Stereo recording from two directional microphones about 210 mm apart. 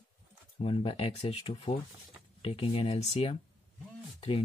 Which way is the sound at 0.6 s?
25° left (ahead or behind).